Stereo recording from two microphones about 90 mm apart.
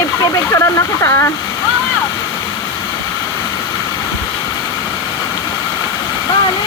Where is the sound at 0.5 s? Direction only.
35° left (ahead or behind).